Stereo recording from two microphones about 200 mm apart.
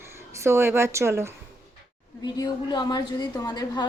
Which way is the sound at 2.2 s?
20° left (ahead or behind).